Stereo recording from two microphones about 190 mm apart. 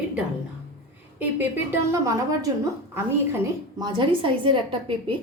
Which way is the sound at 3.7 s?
25° right (ahead or behind).